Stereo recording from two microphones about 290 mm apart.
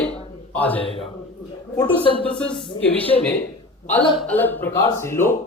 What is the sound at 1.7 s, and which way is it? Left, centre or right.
Speech, centre.